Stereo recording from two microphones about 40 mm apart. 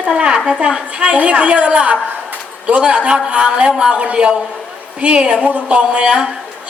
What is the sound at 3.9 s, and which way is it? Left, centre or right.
A woman's voice, right.